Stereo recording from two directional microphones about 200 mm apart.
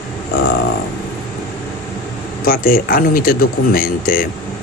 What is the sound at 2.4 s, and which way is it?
Speech, 45° left (ahead or behind).